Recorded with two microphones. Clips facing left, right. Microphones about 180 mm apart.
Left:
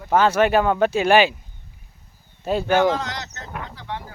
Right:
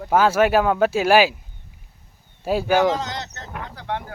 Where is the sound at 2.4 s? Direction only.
5° right (ahead or behind).